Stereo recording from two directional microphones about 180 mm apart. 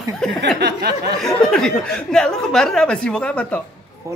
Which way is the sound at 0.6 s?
70° right (ahead or behind).